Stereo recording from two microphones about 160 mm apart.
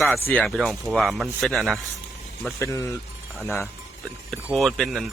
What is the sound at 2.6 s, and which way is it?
A man's voice, 20° left (ahead or behind).